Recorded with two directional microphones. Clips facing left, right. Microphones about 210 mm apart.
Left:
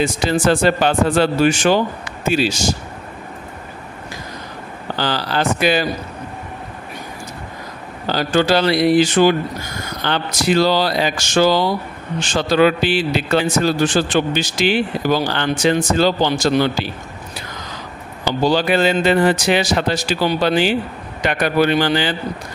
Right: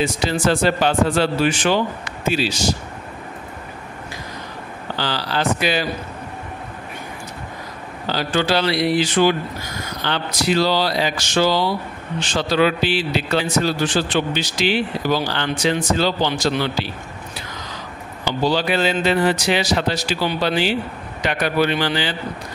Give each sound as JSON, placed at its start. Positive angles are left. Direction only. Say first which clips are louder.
{"t": 0.0, "sound": "a man's voice", "louder": "left 3 dB", "side_deg": 50}
{"t": 4.9, "sound": "a man's voice", "louder": "left 3 dB", "side_deg": 50}
{"t": 8.1, "sound": "a man's voice", "louder": "left 4 dB", "side_deg": 45}
{"t": 18.4, "sound": "a man's voice", "louder": "left 3 dB", "side_deg": 50}